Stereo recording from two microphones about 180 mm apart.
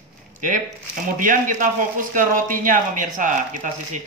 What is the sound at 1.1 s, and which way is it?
Speech, 50° right (ahead or behind).